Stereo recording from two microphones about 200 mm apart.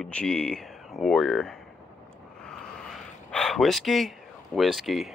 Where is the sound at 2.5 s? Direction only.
Centre (ahead or behind).